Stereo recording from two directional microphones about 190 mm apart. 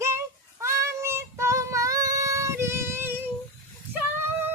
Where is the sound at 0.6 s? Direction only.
15° right (ahead or behind).